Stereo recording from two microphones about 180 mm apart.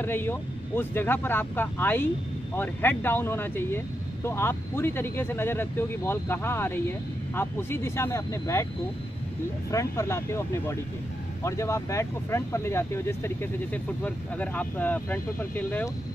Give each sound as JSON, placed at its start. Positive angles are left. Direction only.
{"t": 0.0, "sound": "speech", "side_deg": 10}
{"t": 9.7, "sound": "speech", "side_deg": 15}